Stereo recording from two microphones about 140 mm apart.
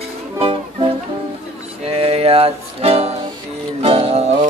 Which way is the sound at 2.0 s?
45° right (ahead or behind).